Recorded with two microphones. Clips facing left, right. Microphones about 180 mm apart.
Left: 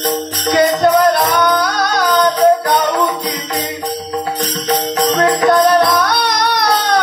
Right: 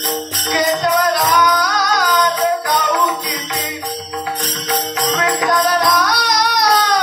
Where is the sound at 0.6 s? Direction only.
55° left (ahead or behind).